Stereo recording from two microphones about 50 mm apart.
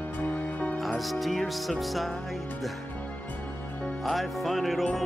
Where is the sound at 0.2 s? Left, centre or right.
Left.